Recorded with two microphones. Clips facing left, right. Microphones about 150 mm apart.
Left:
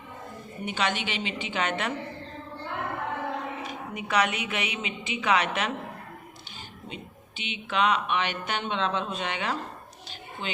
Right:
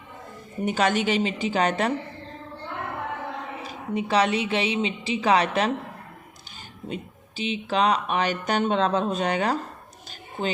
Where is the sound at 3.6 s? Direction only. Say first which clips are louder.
Right 6 dB; 30° right (ahead or behind).